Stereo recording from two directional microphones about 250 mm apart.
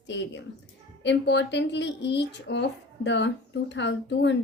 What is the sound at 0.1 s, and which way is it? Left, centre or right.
Speech, left.